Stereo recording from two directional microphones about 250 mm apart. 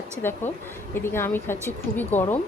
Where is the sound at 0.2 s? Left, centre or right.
Centre.